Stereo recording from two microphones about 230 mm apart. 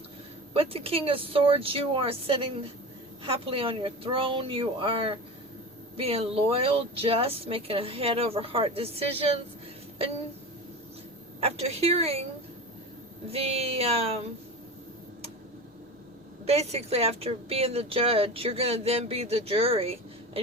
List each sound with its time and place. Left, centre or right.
0.5 s a woman's voice: right
11.3 s a woman's voice: right
13.2 s a woman's voice: right
16.5 s a woman's voice: right